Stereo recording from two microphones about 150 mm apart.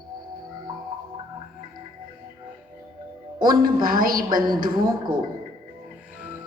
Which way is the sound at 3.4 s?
70° right (ahead or behind).